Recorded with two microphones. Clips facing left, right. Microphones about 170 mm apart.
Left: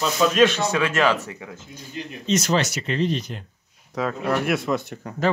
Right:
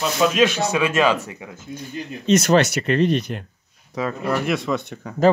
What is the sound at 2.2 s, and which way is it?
Speech, 60° right (ahead or behind).